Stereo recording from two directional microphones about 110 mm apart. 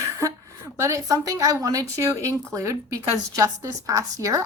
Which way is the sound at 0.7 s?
25° right (ahead or behind).